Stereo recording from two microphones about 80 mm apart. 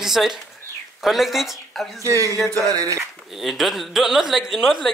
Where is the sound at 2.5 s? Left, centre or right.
Right.